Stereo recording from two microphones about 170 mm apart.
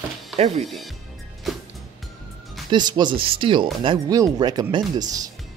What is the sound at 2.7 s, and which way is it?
Speech, 25° right (ahead or behind).